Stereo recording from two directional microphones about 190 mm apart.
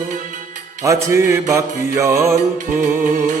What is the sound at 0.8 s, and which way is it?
Music, 15° right (ahead or behind).